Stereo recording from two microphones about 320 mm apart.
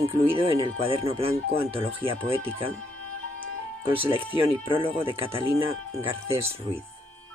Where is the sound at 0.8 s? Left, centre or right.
Centre.